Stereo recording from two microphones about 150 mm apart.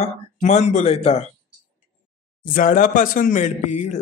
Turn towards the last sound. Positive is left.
turn(degrees=50)  # may be behind; listen again after turning